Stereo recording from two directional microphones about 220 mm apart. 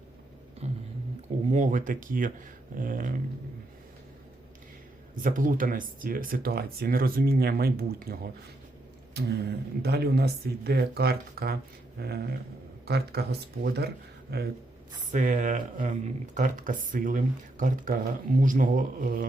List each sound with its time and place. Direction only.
0.6 s a sound: 30° right (ahead or behind)
1.5 s speech: 35° right (ahead or behind)
5.1 s speech: 40° right (ahead or behind)
15.1 s speech: 35° right (ahead or behind)